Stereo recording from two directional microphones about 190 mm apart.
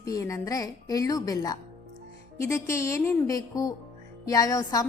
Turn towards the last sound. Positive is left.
turn(degrees=20)  # may be behind; listen again after turning